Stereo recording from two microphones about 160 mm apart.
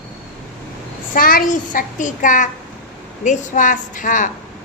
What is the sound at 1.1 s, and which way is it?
A child's voice, 60° left (ahead or behind).